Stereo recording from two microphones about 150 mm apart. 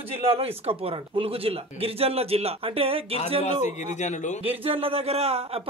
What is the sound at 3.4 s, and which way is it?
A man's voice, 50° left (ahead or behind).